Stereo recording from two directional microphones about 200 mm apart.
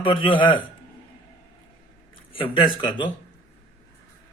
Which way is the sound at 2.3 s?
25° left (ahead or behind).